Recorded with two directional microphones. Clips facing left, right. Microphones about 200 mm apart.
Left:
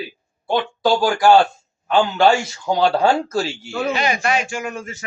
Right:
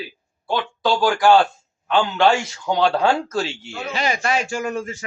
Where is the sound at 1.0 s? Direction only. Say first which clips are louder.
Left 1 dB; 10° left (ahead or behind).